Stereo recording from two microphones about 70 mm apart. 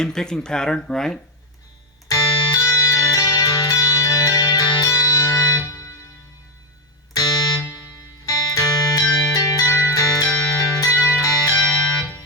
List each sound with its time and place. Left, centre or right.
0.0 s speech: centre
2.0 s music: left
4.4 s music: left
7.1 s music: left
8.3 s music: left
10.9 s music: left